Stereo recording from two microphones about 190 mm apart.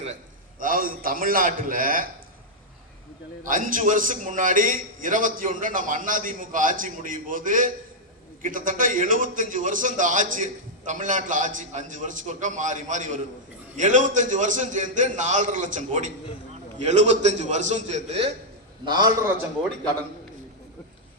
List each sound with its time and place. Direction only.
0.6 s a man's voice: 45° right (ahead or behind)
3.4 s a man's voice: 45° right (ahead or behind)
18.9 s a man's voice: 20° right (ahead or behind)